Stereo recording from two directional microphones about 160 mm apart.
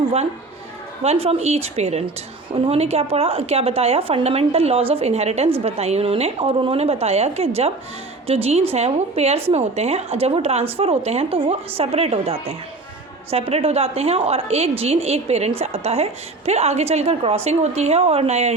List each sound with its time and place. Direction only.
1.0 s a woman's voice: 40° right (ahead or behind)